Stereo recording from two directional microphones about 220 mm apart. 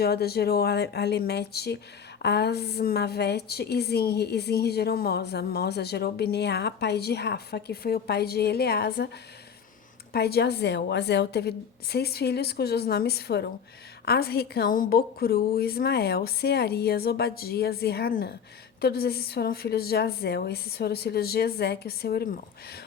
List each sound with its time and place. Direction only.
0.0 s a woman's voice: 45° left (ahead or behind)
10.1 s a woman's voice: 45° left (ahead or behind)